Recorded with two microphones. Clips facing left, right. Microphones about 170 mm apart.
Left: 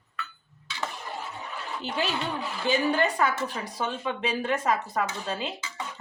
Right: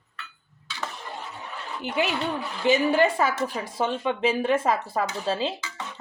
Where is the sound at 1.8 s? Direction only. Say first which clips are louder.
Right 4 dB; 15° right (ahead or behind).